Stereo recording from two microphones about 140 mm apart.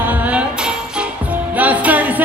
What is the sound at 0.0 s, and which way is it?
Music, 10° right (ahead or behind).